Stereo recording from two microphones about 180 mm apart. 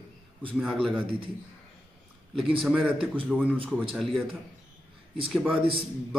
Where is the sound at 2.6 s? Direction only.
5° right (ahead or behind).